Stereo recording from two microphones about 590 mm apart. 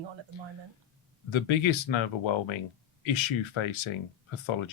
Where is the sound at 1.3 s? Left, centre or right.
Left.